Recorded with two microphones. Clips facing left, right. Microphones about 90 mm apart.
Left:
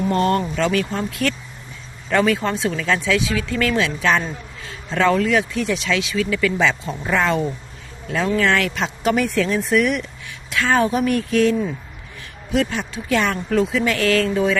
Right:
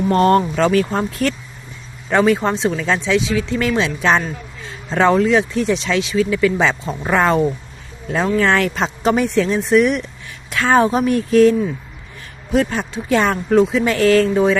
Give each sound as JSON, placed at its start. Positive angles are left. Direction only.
{"t": 0.1, "sound": "speech", "side_deg": -40}
{"t": 2.0, "sound": "speech", "side_deg": -25}
{"t": 7.1, "sound": "speech", "side_deg": -40}
{"t": 12.5, "sound": "speech", "side_deg": -35}